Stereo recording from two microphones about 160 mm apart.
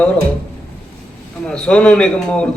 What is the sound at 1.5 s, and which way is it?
Speech, 5° left (ahead or behind).